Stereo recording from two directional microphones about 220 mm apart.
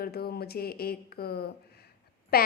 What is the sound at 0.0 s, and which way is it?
Speech, 45° left (ahead or behind).